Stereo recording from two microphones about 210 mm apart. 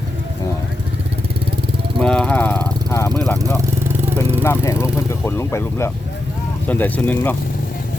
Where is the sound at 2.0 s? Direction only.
5° left (ahead or behind).